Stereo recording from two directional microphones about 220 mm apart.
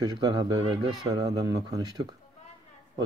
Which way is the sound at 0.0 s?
20° right (ahead or behind).